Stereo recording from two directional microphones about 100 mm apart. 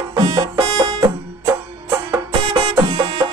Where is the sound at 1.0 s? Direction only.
30° right (ahead or behind).